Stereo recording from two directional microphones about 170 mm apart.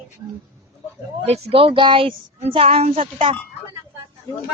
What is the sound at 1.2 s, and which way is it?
Speech, 35° right (ahead or behind).